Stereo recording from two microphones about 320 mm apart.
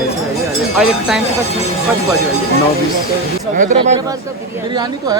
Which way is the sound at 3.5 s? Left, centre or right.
Right.